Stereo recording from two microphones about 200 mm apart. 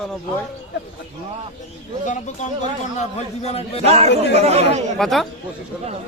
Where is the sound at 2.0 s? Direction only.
40° left (ahead or behind).